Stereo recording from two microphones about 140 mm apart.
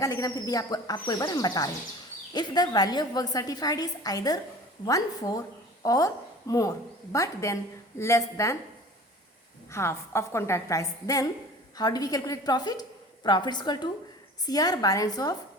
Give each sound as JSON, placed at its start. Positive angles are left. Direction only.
{"t": 0.0, "sound": "a woman's voice", "side_deg": 25}
{"t": 9.7, "sound": "a woman's voice", "side_deg": 20}